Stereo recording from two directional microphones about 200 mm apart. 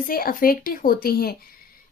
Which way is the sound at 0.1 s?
45° left (ahead or behind).